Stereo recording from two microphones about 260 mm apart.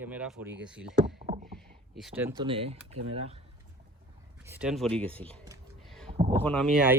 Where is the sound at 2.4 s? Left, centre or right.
Right.